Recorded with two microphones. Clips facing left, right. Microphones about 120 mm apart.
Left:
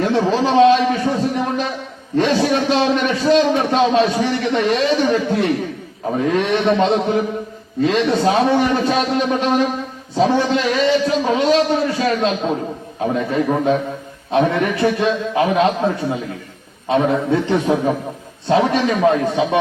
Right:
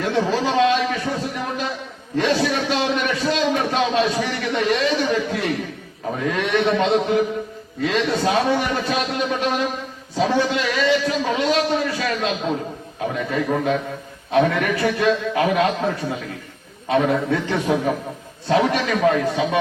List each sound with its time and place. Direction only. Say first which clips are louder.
0.0 s a man's voice: left 4 dB; 30° left (ahead or behind)
2.1 s a man's voice: left 4 dB; 35° left (ahead or behind)
2.6 s a sound: left 5 dB; 35° left (ahead or behind)
5.0 s a man's voice: left 5 dB; 35° left (ahead or behind)